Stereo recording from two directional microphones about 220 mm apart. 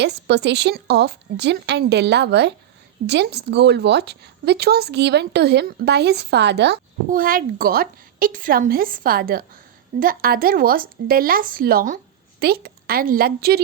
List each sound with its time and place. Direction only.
0.0 s speech: 50° right (ahead or behind)